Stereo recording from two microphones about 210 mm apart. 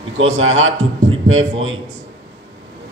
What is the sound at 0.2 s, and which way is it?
A man's voice, 70° right (ahead or behind).